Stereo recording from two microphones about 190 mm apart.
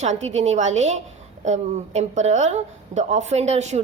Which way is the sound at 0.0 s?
35° right (ahead or behind).